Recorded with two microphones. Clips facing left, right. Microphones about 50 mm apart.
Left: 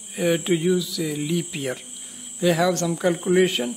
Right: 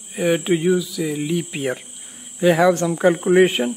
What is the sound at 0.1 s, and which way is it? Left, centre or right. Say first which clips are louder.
Speech: right 3 dB; centre.